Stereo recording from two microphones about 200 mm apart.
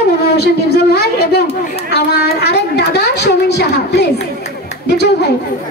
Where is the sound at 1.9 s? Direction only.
55° left (ahead or behind).